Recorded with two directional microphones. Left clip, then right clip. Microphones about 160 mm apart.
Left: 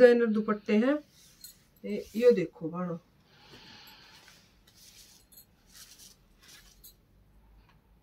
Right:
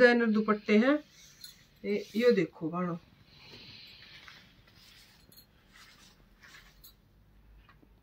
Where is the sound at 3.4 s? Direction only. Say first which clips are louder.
Right 1 dB; 45° left (ahead or behind).